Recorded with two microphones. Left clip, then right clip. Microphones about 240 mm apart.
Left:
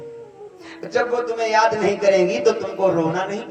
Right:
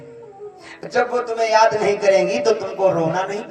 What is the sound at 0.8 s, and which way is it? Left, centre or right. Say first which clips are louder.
Speech: right 1 dB; right.